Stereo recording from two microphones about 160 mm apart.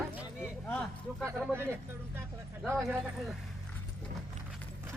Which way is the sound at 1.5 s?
15° right (ahead or behind).